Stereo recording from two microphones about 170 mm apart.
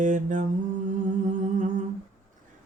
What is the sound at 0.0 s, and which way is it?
Speech, 50° right (ahead or behind).